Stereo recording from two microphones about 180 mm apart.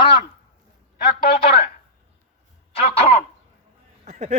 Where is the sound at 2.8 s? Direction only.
35° left (ahead or behind).